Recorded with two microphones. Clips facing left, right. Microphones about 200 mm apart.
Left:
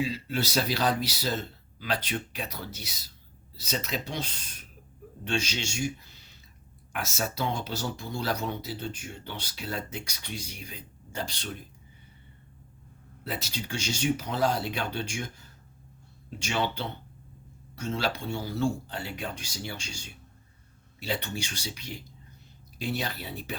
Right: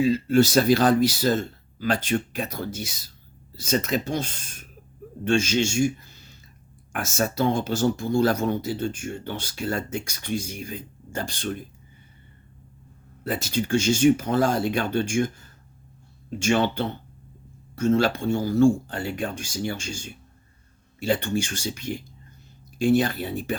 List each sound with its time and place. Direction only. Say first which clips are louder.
0.0 s speech: right 12 dB; 45° right (ahead or behind)
13.2 s speech: right 9 dB; 50° right (ahead or behind)